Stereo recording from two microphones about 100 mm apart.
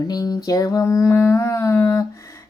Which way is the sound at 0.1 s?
40° left (ahead or behind).